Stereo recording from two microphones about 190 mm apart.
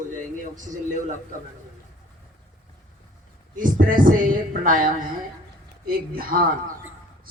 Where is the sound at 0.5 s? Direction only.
40° right (ahead or behind).